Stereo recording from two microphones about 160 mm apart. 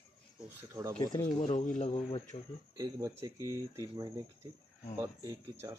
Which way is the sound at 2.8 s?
20° right (ahead or behind).